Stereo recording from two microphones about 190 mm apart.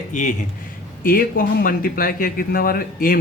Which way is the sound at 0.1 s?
40° left (ahead or behind).